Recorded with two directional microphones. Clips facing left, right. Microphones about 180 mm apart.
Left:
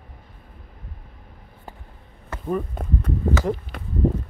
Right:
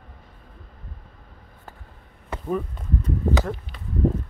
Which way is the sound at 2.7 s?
55° left (ahead or behind).